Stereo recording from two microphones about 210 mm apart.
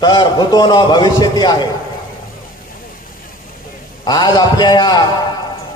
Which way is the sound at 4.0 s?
20° left (ahead or behind).